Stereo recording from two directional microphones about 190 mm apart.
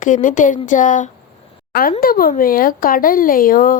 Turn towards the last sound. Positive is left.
turn(degrees=45)  # may be behind; listen again after turning